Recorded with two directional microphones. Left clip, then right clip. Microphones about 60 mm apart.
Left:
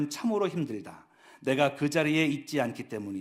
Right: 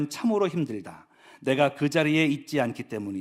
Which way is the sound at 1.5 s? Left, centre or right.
Right.